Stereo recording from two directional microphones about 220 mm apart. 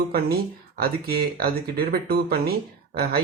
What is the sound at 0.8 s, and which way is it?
Speech, 45° right (ahead or behind).